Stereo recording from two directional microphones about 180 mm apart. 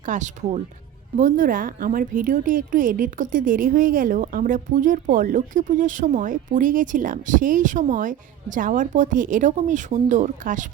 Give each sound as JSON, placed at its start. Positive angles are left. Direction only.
{"t": 0.0, "sound": "a woman's voice", "side_deg": -45}